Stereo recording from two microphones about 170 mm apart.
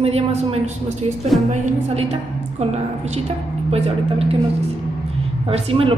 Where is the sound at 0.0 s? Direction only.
35° right (ahead or behind).